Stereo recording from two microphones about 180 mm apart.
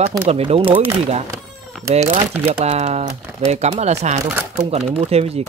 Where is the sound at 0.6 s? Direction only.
10° right (ahead or behind).